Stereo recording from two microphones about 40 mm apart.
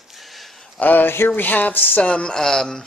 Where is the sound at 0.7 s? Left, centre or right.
Left.